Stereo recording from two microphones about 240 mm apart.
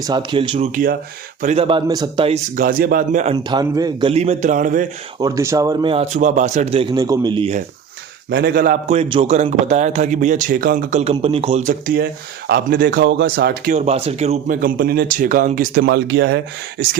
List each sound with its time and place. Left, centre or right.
0.0 s a man's voice: centre
3.3 s a man's voice: centre; by 4.9 s right
5.2 s a man's voice: centre
8.3 s a man's voice: right